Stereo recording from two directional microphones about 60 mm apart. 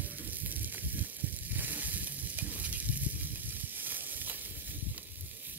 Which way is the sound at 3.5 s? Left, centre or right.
Right.